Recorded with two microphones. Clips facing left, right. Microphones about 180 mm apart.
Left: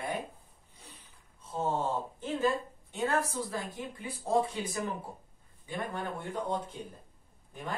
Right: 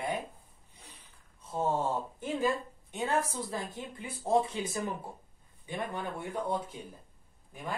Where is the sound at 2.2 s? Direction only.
15° right (ahead or behind).